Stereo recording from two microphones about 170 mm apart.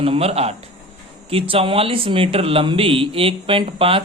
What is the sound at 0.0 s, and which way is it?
Speech, 35° right (ahead or behind).